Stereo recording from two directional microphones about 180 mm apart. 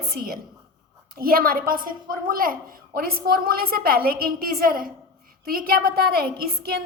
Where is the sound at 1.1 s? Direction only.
55° right (ahead or behind).